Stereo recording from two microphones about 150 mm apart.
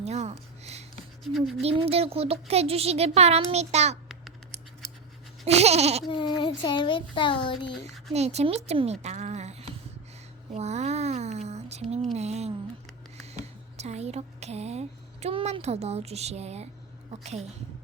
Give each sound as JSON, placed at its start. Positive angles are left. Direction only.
{"t": 0.0, "sound": "speech", "side_deg": -45}
{"t": 1.2, "sound": "speech", "side_deg": 0}
{"t": 1.6, "sound": "speech", "side_deg": -40}
{"t": 5.5, "sound": "speech", "side_deg": -45}
{"t": 6.1, "sound": "speech", "side_deg": 30}
{"t": 7.9, "sound": "speech", "side_deg": 0}
{"t": 8.1, "sound": "speech", "side_deg": -45}
{"t": 10.5, "sound": "a sound", "side_deg": -50}
{"t": 13.7, "sound": "speech", "side_deg": -45}